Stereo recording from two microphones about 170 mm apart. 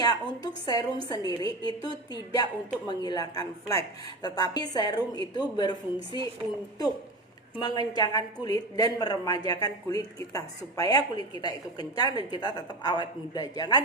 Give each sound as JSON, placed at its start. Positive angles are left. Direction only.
{"t": 0.0, "sound": "a woman's voice", "side_deg": 25}
{"t": 7.6, "sound": "a woman's voice", "side_deg": 25}